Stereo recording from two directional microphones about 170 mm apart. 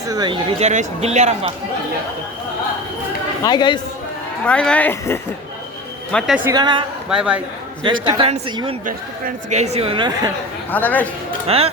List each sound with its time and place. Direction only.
0.0 s speech: 20° right (ahead or behind)
0.6 s speech: 45° right (ahead or behind)
3.4 s a man's voice: 25° left (ahead or behind)
4.4 s a man's voice: 5° left (ahead or behind)
6.5 s a man's voice: 25° right (ahead or behind)
7.1 s a man's voice: 5° right (ahead or behind)
7.9 s a man's voice: 30° right (ahead or behind)
8.9 s speech: 50° right (ahead or behind); by 10.3 s 30° right (ahead or behind)
10.7 s speech: 10° left (ahead or behind)
11.4 s speech: 35° right (ahead or behind)